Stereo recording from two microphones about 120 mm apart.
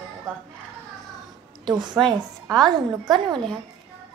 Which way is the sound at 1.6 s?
40° right (ahead or behind).